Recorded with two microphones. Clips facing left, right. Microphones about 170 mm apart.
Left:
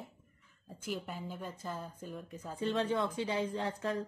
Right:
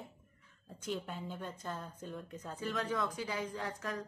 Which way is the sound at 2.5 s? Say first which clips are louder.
Left 4 dB; 30° left (ahead or behind).